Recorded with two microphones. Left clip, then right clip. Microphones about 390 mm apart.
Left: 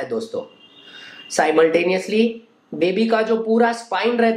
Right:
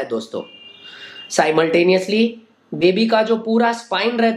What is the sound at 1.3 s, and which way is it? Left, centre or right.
Speech, right.